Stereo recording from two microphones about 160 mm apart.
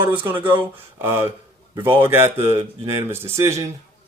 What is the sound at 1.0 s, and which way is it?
Speech, 15° right (ahead or behind).